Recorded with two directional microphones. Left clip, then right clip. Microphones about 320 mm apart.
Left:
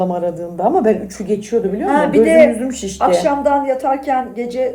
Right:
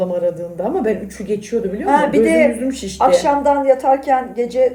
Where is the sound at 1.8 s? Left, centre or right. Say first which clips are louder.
Even; centre.